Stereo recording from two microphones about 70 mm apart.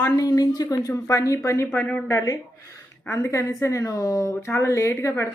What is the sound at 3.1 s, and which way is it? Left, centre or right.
Speech, left.